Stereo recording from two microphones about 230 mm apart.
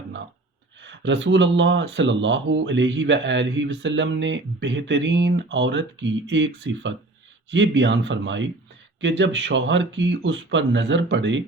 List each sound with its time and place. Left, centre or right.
0.8 s speech: right